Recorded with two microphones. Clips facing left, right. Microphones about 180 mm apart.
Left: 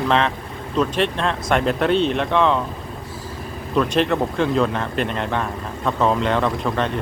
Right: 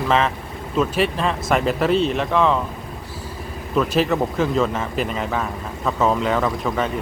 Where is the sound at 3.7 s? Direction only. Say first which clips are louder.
Even; 5° right (ahead or behind).